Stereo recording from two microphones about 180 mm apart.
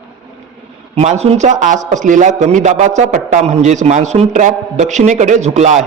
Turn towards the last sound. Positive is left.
turn(degrees=-40)  # may be behind; listen again after turning